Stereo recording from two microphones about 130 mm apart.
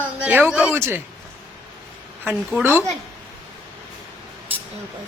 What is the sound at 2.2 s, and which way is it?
Speech, 10° right (ahead or behind).